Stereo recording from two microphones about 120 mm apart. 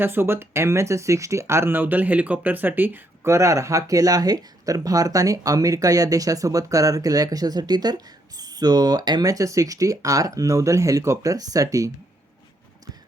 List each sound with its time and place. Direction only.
0.0 s speech: 20° right (ahead or behind)